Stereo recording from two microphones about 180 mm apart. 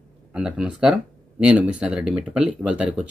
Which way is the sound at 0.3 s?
5° right (ahead or behind).